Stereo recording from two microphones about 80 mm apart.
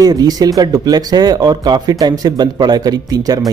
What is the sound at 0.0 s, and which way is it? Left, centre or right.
Speech, right.